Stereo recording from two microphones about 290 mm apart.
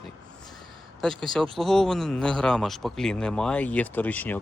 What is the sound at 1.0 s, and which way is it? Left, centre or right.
Speech, centre.